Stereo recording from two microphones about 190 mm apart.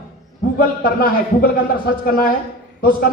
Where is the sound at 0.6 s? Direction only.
55° left (ahead or behind).